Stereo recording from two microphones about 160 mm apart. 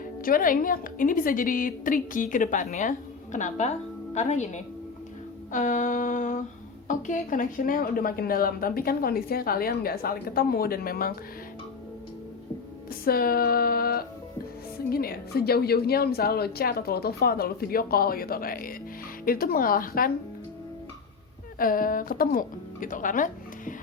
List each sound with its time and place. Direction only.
0.0 s a woman's voice: 60° left (ahead or behind)
3.3 s a sound: 50° left (ahead or behind)
6.8 s a woman's voice: 50° left (ahead or behind); by 11.1 s 70° left (ahead or behind)
12.9 s a sound: 70° left (ahead or behind)
14.8 s a woman's voice: 70° left (ahead or behind)
21.6 s speech: 60° left (ahead or behind)